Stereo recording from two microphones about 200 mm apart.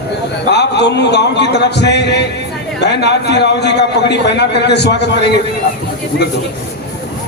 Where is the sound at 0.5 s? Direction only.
60° left (ahead or behind).